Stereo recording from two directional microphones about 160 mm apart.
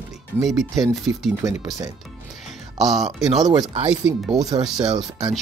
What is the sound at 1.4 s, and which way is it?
Speech, 20° right (ahead or behind).